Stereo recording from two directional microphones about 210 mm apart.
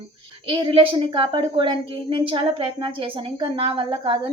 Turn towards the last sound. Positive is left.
turn(degrees=-25)  # may be behind; listen again after turning